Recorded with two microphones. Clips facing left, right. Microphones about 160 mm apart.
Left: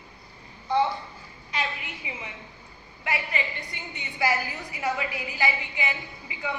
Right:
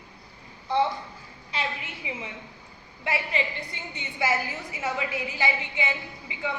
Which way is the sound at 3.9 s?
25° right (ahead or behind).